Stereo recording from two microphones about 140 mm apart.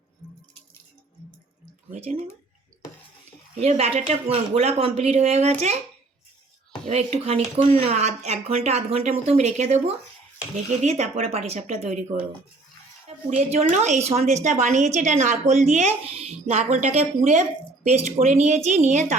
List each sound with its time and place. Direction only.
1.9 s speech: 55° right (ahead or behind)
3.5 s speech: 50° right (ahead or behind)
6.8 s a woman's voice: 50° right (ahead or behind)